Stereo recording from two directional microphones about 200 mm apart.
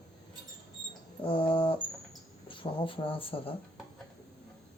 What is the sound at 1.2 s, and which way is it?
Speech, 25° left (ahead or behind).